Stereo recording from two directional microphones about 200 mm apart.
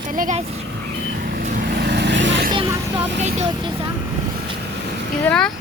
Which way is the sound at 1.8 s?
60° right (ahead or behind).